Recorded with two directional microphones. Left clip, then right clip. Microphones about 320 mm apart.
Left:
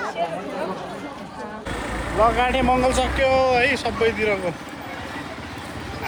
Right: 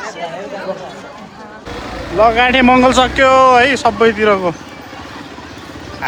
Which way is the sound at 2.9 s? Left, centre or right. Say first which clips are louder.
Right 10 dB; right.